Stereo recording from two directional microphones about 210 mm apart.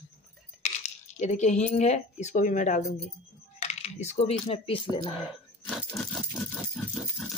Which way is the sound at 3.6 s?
30° left (ahead or behind).